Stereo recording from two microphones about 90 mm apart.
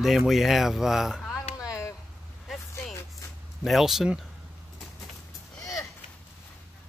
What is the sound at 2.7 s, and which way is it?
Music, 30° left (ahead or behind).